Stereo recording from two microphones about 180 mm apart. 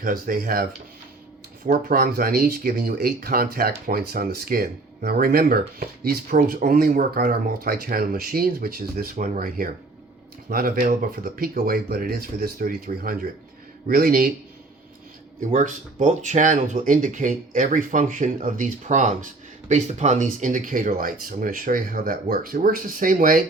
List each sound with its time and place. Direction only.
0.0 s speech: 50° right (ahead or behind)
1.6 s speech: 50° right (ahead or behind)
15.5 s speech: 45° right (ahead or behind)